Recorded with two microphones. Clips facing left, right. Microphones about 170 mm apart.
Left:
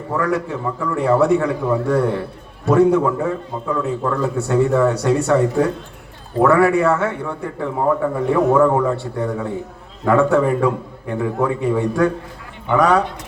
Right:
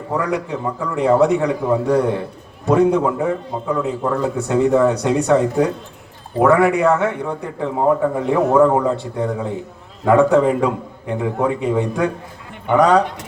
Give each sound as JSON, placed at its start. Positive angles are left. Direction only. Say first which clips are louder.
{"t": 0.1, "sound": "a man's voice", "louder": "left 1 dB", "side_deg": -20}